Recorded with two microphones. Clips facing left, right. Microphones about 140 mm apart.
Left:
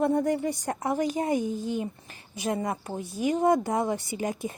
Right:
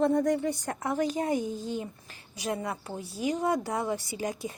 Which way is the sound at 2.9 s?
15° left (ahead or behind).